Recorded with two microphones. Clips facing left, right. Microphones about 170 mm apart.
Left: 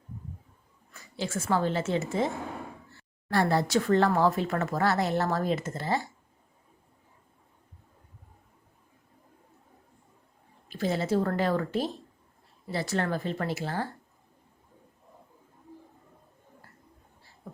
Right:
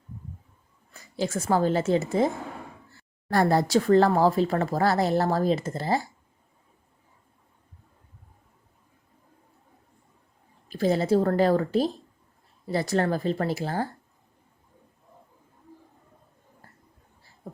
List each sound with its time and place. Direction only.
1.1 s speech: 40° right (ahead or behind)
10.7 s speech: 40° right (ahead or behind)